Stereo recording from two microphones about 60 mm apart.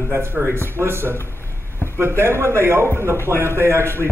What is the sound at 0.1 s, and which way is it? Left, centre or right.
Speech, right.